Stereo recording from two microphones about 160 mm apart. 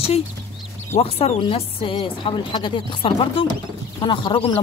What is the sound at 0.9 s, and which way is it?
Speech, 40° left (ahead or behind).